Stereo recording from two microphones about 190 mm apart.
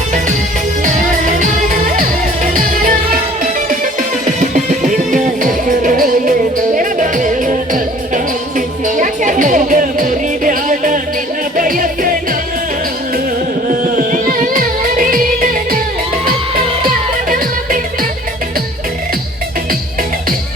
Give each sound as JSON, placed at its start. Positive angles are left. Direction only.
{"t": 2.0, "sound": "music", "side_deg": -45}
{"t": 4.3, "sound": "music", "side_deg": -40}
{"t": 13.7, "sound": "music", "side_deg": -45}
{"t": 17.2, "sound": "music", "side_deg": -45}